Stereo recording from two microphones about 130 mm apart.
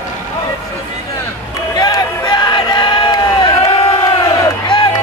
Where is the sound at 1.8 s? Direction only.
30° left (ahead or behind).